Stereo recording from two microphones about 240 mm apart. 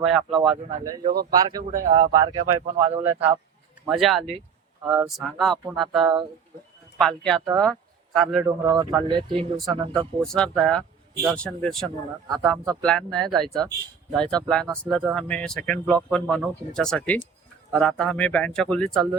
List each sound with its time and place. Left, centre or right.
0.0 s speech: centre
1.0 s speech: right
1.3 s speech: centre
1.7 s speech: right
2.1 s speech: centre
3.0 s speech: centre
8.4 s speech: centre
9.4 s speech: centre